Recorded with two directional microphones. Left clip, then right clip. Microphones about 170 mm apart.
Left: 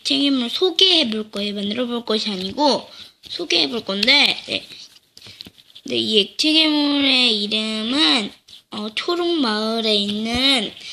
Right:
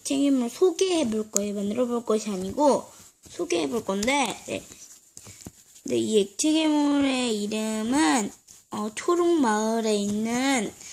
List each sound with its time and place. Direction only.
0.0 s speech: 10° right (ahead or behind)
6.1 s a woman's voice: 20° right (ahead or behind)